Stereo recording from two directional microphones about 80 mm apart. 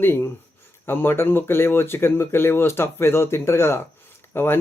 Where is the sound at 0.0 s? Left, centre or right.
Left.